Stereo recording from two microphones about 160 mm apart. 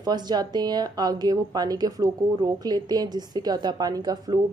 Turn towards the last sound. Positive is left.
turn(degrees=-25)  # may be behind; listen again after turning